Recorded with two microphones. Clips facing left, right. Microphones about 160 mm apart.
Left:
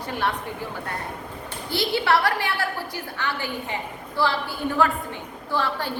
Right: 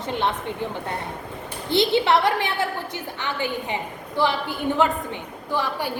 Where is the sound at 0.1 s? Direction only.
20° right (ahead or behind).